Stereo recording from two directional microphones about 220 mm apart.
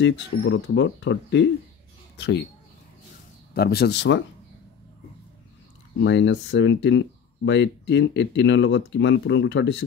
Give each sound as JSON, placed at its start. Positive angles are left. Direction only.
{"t": 0.0, "sound": "speech", "side_deg": 55}
{"t": 3.5, "sound": "speech", "side_deg": 45}
{"t": 5.9, "sound": "speech", "side_deg": 55}